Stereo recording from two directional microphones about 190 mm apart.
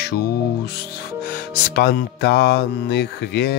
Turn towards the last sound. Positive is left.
turn(degrees=60)  # may be behind; listen again after turning